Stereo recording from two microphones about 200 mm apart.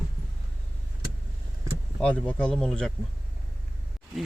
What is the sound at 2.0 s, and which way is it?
Speech, 5° left (ahead or behind).